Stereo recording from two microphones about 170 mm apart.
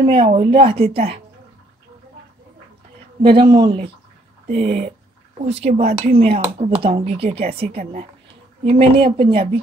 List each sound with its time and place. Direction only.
0.0 s speech: 35° right (ahead or behind)
3.2 s speech: 30° right (ahead or behind)
4.6 s speech: 60° right (ahead or behind)
5.6 s speech: 40° right (ahead or behind)
6.2 s speech: 40° right (ahead or behind)
7.8 s speech: 50° right (ahead or behind)
8.6 s speech: 35° right (ahead or behind)